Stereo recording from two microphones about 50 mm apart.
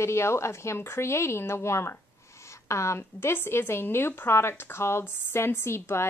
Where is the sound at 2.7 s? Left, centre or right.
Left.